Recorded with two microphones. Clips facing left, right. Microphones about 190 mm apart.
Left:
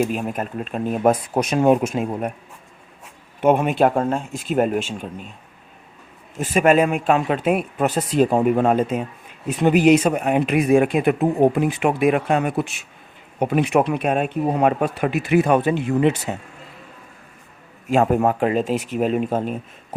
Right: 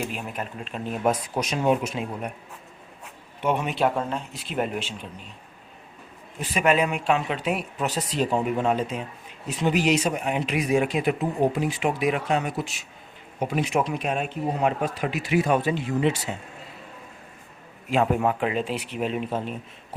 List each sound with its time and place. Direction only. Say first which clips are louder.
0.0 s speech: left 9 dB; 45° left (ahead or behind)
3.4 s speech: left 7 dB; 50° left (ahead or behind)
6.4 s speech: left 6 dB; 50° left (ahead or behind)
17.8 s speech: left 5 dB; 45° left (ahead or behind)